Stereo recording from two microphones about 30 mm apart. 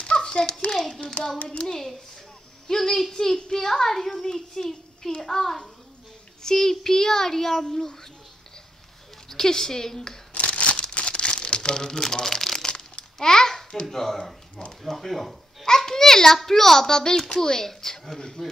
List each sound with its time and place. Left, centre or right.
0.0 s a sound: left
0.7 s a child's voice: centre
1.5 s speech: left
2.7 s a child's voice: centre
9.3 s a child's voice: centre
10.3 s scissors: left
11.0 s crumpling: left
11.7 s a child's voice: left
13.8 s a child's voice: centre
15.6 s a child's voice: centre